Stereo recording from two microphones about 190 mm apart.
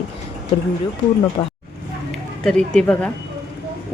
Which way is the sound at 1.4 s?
20° left (ahead or behind).